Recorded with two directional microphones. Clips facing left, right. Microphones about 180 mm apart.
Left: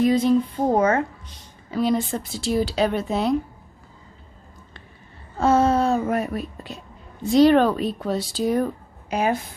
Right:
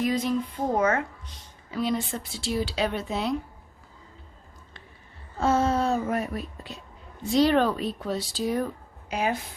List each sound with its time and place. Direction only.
0.0 s speech: 30° left (ahead or behind); by 3.3 s 45° left (ahead or behind)
5.4 s speech: 65° left (ahead or behind)
7.3 s a woman's voice: 55° left (ahead or behind)